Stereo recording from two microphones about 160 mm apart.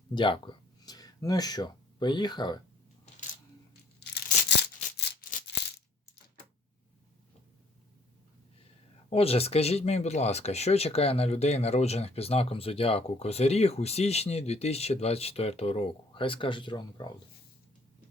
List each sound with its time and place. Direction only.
0.1 s speech: 30° left (ahead or behind)
4.0 s tearing: 90° left
4.9 s music: 90° left
9.0 s speech: 40° left (ahead or behind)